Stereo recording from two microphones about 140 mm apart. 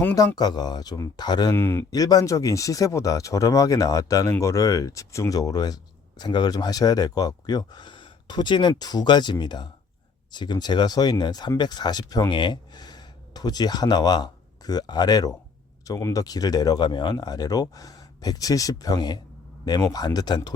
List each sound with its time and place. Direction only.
0.0 s speech: 15° left (ahead or behind)
0.3 s speech: 30° left (ahead or behind)
1.5 s speech: 15° left (ahead or behind)
1.9 s speech: 25° left (ahead or behind)